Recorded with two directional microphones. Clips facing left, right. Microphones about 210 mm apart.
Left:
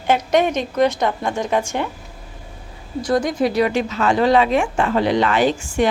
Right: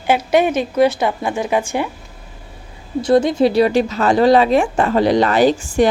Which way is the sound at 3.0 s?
25° right (ahead or behind).